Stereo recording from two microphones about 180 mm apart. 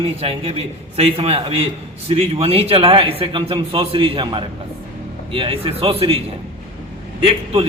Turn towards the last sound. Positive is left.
turn(degrees=-30)  # may be behind; listen again after turning